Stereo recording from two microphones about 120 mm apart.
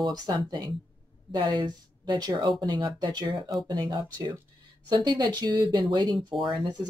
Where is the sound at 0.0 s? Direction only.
35° right (ahead or behind).